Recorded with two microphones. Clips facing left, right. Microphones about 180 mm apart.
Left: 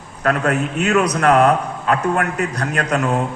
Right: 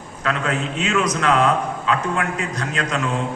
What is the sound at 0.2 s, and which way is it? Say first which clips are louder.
A man's voice: left 5 dB; 55° left (ahead or behind).